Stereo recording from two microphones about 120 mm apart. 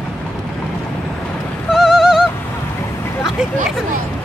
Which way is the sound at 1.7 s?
5° right (ahead or behind).